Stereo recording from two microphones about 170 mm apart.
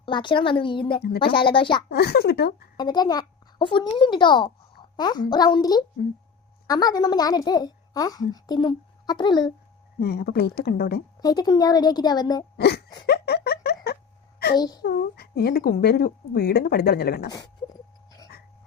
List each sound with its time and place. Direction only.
0.0 s speech: 30° left (ahead or behind)
1.9 s speech: 70° left (ahead or behind)
2.7 s a child's voice: 25° left (ahead or behind)
10.0 s speech: 70° left (ahead or behind)
11.2 s speech: 25° left (ahead or behind)
12.5 s wail: 70° left (ahead or behind)
13.1 s a sound: 70° left (ahead or behind)
14.8 s speech: 65° left (ahead or behind)
17.3 s dog: 25° left (ahead or behind)